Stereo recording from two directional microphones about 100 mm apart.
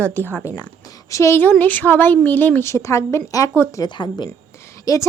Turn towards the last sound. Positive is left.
turn(degrees=30)  # may be behind; listen again after turning